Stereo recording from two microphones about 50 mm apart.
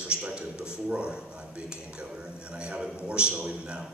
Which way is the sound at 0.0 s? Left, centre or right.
Right.